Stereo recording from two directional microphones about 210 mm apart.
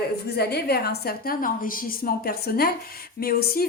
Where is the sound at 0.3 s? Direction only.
50° left (ahead or behind).